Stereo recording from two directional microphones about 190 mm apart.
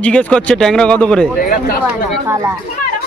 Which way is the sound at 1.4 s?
50° left (ahead or behind).